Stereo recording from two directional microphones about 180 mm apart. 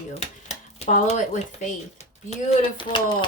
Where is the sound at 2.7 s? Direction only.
25° left (ahead or behind).